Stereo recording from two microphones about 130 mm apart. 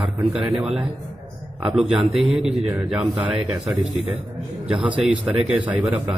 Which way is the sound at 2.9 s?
10° right (ahead or behind).